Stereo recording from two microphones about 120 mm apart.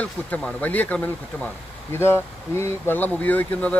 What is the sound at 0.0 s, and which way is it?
Speech, 10° left (ahead or behind).